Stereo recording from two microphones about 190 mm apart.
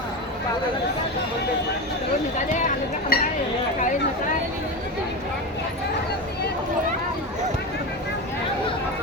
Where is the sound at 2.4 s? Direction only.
40° left (ahead or behind).